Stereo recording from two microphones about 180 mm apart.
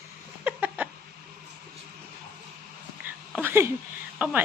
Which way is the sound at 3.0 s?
10° right (ahead or behind).